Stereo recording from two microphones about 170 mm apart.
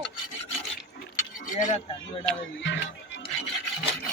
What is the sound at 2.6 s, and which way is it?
Speech, 90° left.